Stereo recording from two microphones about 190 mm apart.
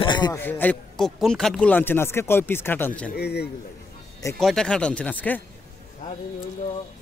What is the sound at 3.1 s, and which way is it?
Speech, 60° left (ahead or behind).